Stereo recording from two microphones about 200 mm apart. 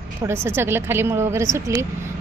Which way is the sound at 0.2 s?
10° right (ahead or behind).